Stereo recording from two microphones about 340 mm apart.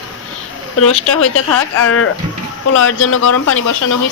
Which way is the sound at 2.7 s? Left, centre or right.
Left.